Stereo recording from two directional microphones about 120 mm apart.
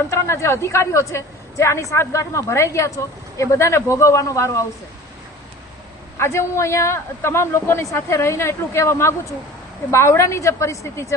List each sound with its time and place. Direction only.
0.1 s a woman's voice: 20° left (ahead or behind)
6.1 s a woman's voice: 25° left (ahead or behind)